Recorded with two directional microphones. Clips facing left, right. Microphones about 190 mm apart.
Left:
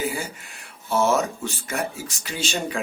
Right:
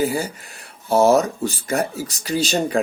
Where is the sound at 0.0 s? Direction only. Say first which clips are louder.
Right 6 dB; 40° right (ahead or behind).